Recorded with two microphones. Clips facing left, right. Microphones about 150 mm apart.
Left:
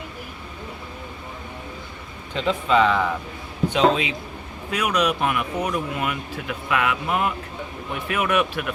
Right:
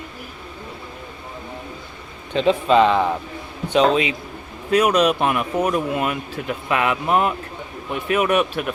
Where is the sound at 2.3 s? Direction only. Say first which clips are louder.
Right 4 dB; 25° right (ahead or behind).